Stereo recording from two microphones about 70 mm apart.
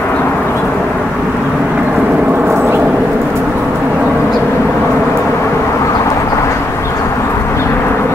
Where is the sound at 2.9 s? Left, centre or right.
Centre.